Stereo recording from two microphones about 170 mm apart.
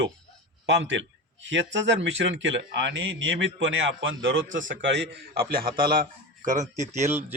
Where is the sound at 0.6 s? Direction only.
90° right; by 7.0 s 45° right (ahead or behind).